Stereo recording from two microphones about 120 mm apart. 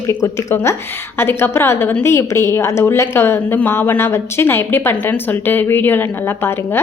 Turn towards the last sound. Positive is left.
turn(degrees=20)  # may be behind; listen again after turning